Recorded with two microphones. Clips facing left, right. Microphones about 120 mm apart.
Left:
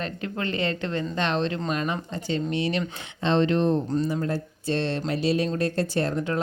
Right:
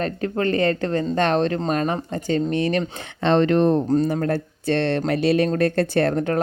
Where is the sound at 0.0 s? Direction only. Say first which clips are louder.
Right 7 dB; 40° right (ahead or behind).